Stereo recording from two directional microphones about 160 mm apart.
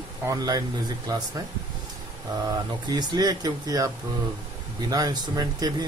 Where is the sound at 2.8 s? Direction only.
25° right (ahead or behind).